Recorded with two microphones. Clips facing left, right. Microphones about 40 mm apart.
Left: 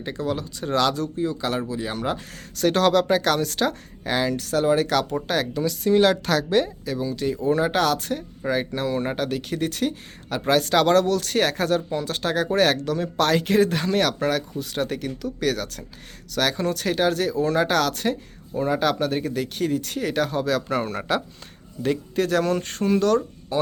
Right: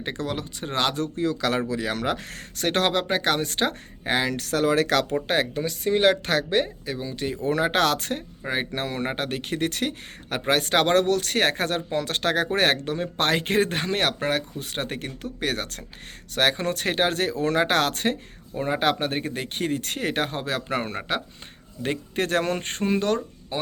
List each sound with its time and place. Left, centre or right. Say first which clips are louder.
0.0 s speech: left 2 dB; right
1.1 s speech: right 1 dB; right
2.6 s speech: left 4 dB; right
5.3 s speech: left 1 dB; right
7.4 s speech: left 1 dB; right
8.4 s speech: left 4 dB; right
10.4 s speech: left 2 dB; right
12.5 s speech: left 2 dB; right
22.9 s speech: left 4 dB; right